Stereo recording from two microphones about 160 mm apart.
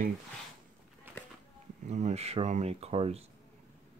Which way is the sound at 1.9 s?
45° right (ahead or behind).